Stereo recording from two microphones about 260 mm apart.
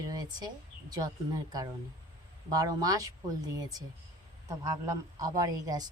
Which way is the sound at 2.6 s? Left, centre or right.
Centre.